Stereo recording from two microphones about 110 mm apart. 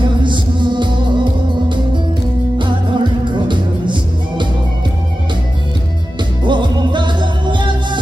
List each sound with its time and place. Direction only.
0.0 s music: 45° right (ahead or behind)
2.6 s music: 45° right (ahead or behind)
6.4 s music: 45° right (ahead or behind)